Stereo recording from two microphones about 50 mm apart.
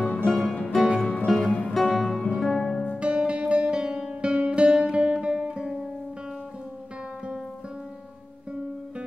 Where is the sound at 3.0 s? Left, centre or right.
Right.